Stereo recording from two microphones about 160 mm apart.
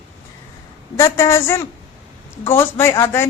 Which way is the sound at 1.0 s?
15° left (ahead or behind).